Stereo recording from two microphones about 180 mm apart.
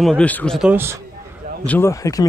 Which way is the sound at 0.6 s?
10° right (ahead or behind).